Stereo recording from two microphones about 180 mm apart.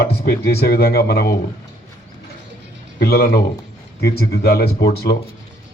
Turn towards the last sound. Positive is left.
turn(degrees=65)  # may be behind; listen again after turning